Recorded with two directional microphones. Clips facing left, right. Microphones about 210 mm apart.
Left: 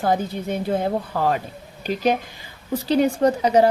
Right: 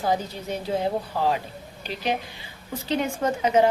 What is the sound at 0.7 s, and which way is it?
Speech, 55° left (ahead or behind).